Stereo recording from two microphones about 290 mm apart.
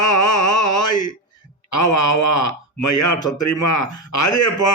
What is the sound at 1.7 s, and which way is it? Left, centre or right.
A man's voice, left.